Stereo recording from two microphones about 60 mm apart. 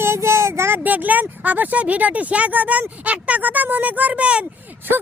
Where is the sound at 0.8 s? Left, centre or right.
Right.